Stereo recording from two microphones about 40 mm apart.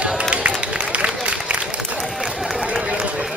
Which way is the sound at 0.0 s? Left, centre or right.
Right.